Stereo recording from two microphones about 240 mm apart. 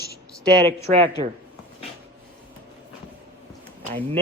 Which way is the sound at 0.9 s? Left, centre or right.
Right.